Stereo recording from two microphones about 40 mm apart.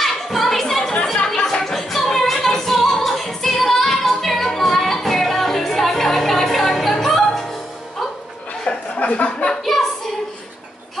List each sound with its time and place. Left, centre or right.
0.0 s music: centre
8.6 s chuckle: left
9.7 s child singing: centre